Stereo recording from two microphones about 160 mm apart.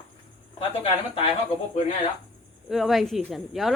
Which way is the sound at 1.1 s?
35° left (ahead or behind).